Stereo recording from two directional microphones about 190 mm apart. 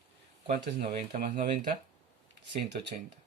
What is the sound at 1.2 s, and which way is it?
Speech, 50° right (ahead or behind).